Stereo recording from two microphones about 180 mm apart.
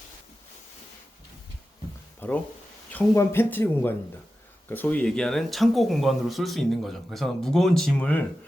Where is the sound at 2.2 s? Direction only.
10° left (ahead or behind).